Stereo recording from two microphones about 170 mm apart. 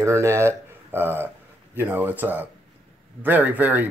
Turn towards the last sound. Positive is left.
turn(degrees=-10)  # may be behind; listen again after turning